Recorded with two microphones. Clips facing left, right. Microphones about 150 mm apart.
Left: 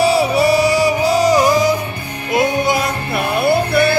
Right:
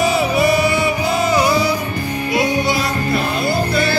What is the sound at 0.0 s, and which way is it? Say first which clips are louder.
Music: left 2 dB; 35° left (ahead or behind).